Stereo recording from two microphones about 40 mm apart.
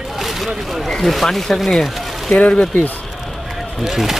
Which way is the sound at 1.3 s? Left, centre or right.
Centre.